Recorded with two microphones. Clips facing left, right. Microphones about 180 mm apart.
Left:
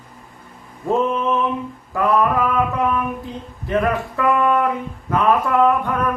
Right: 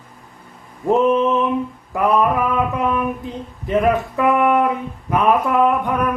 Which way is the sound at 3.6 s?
20° right (ahead or behind).